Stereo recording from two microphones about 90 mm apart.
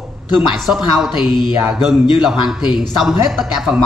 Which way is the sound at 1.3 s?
65° left (ahead or behind).